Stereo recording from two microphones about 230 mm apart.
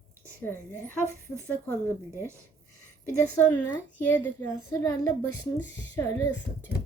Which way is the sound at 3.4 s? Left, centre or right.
Centre.